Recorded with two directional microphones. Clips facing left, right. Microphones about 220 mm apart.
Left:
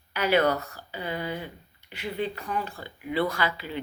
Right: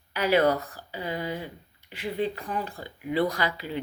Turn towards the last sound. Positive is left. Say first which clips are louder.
# even
turn(degrees=-35)  # may be behind; listen again after turning